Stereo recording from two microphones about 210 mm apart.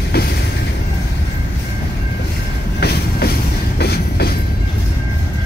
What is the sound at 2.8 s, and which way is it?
Train, 50° left (ahead or behind).